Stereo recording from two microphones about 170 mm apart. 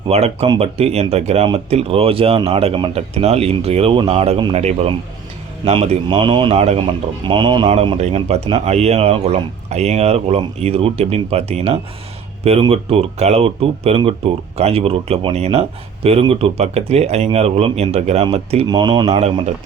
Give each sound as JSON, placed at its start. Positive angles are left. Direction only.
{"t": 0.1, "sound": "a man's voice", "side_deg": -35}
{"t": 18.7, "sound": "a man's voice", "side_deg": -25}